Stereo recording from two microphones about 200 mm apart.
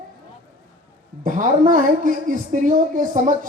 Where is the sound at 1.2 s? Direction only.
40° right (ahead or behind).